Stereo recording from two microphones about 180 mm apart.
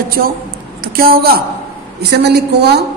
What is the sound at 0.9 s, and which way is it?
A woman's voice, 55° right (ahead or behind).